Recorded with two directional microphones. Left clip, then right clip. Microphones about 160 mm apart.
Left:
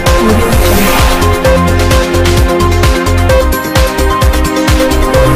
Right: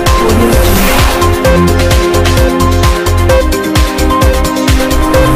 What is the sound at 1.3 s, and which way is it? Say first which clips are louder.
Music: even; centre (ahead or behind).